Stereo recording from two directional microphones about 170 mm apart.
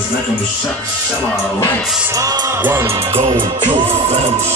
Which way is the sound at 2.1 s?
20° right (ahead or behind).